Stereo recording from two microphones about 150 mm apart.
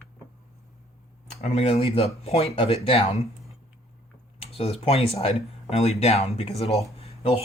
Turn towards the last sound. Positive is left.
turn(degrees=40)  # may be behind; listen again after turning